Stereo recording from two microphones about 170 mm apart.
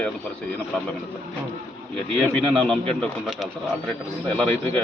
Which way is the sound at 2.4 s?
5° left (ahead or behind).